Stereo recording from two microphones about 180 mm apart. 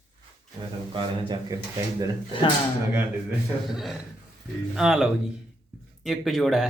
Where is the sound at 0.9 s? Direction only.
25° right (ahead or behind).